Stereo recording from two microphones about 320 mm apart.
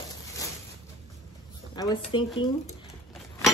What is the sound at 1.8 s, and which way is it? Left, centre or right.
Speech, centre.